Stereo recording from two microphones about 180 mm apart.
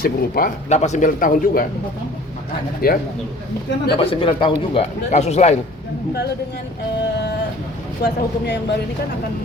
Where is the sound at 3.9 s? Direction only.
30° left (ahead or behind).